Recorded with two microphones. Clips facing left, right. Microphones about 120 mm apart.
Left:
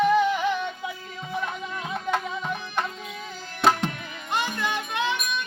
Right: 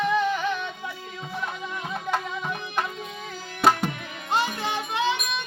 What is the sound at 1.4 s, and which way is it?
Music, centre (ahead or behind).